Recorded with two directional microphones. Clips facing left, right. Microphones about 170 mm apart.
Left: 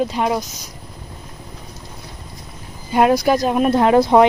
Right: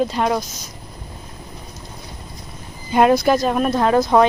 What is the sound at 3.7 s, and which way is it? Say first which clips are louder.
Speech: left 3 dB; 25° left (ahead or behind).